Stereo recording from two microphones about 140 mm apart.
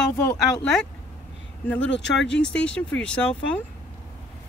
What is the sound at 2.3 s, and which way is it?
Speech, 5° left (ahead or behind).